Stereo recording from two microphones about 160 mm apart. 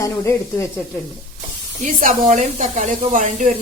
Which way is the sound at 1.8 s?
55° right (ahead or behind).